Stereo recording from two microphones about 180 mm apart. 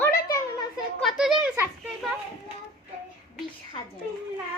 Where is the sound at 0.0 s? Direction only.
15° left (ahead or behind).